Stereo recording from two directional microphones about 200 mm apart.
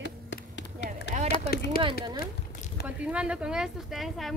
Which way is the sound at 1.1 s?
40° right (ahead or behind).